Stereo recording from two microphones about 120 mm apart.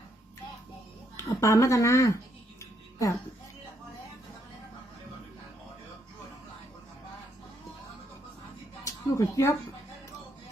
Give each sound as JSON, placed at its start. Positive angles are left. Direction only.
{"t": 1.1, "sound": "speech", "side_deg": 25}
{"t": 2.6, "sound": "music", "side_deg": 25}
{"t": 8.8, "sound": "a sound", "side_deg": 25}